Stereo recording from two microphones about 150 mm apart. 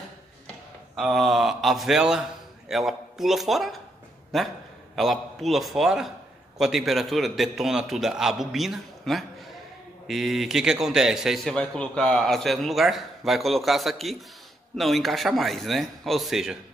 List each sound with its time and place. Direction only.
0.9 s a man's voice: centre (ahead or behind)